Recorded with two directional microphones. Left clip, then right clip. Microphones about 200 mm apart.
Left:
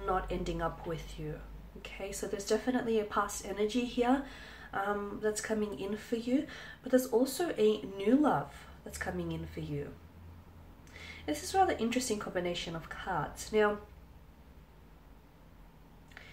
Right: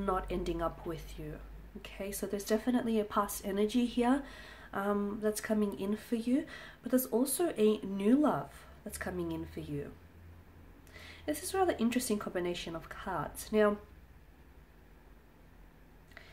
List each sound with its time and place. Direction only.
0.0 s a woman's voice: 40° right (ahead or behind)
10.9 s a woman's voice: 40° right (ahead or behind)